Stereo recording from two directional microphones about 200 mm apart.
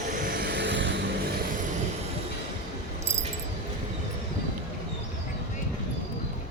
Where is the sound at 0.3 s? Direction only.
55° right (ahead or behind).